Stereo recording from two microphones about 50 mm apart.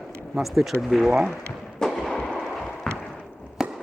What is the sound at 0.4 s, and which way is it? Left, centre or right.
Speech, centre.